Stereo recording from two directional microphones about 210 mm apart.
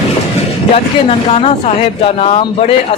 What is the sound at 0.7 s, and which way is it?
Speech, 30° left (ahead or behind).